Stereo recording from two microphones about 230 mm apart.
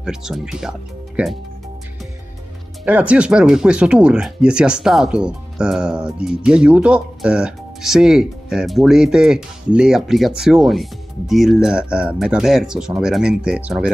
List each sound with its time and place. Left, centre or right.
0.0 s speech: centre
2.8 s speech: centre